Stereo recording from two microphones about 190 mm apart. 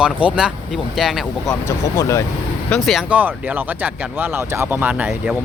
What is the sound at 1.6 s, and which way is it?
Speech, 15° left (ahead or behind).